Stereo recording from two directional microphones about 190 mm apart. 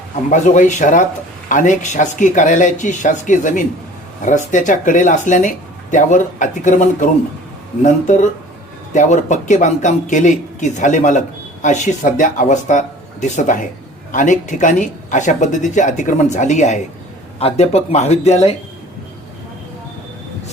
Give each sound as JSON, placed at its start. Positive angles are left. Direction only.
{"t": 0.3, "sound": "a man's voice", "side_deg": 40}